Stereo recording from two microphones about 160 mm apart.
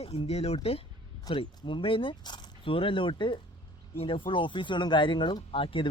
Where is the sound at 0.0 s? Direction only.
40° left (ahead or behind).